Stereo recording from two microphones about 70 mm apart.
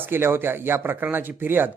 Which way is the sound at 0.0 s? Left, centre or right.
Right.